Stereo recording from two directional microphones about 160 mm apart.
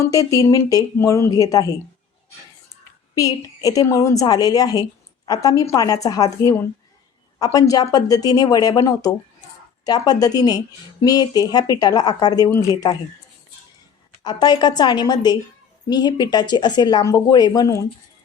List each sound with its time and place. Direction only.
0.0 s a woman's voice: 20° left (ahead or behind)
3.2 s a woman's voice: 20° left (ahead or behind)
14.3 s a woman's voice: 25° left (ahead or behind)